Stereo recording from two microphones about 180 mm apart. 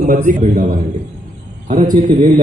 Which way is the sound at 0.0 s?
45° right (ahead or behind).